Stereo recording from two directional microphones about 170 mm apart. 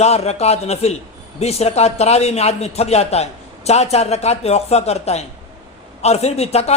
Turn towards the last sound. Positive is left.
turn(degrees=40)  # may be behind; listen again after turning